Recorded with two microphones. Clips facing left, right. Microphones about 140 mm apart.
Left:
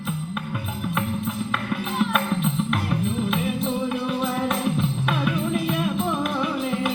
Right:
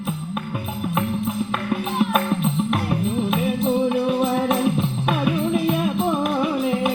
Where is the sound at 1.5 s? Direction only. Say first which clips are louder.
Right 3 dB; 45° right (ahead or behind).